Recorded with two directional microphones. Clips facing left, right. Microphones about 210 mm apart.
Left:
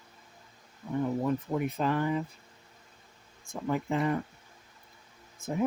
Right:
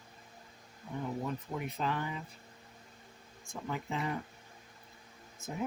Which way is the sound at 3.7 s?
55° left (ahead or behind).